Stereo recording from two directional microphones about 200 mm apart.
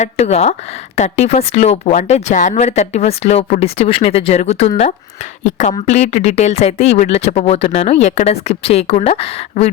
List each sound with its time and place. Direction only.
0.0 s speech: 30° left (ahead or behind)